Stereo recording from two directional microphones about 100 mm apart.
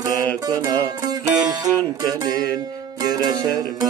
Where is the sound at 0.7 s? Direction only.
40° right (ahead or behind).